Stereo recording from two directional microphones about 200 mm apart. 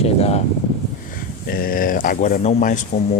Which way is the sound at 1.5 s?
45° left (ahead or behind).